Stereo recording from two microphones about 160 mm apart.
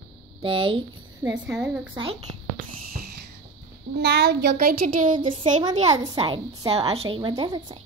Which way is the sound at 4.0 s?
90° right.